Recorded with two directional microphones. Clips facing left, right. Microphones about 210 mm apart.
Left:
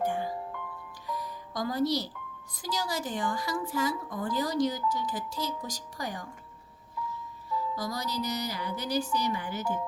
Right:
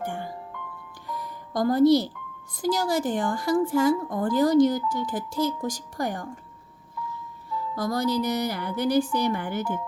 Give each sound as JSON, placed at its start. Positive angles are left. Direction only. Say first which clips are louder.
{"t": 1.0, "sound": "music", "louder": "right 1 dB", "side_deg": -55}
{"t": 2.6, "sound": "a woman's voice", "louder": "right 9 dB", "side_deg": -50}
{"t": 7.8, "sound": "a woman's voice", "louder": "right 9 dB", "side_deg": -55}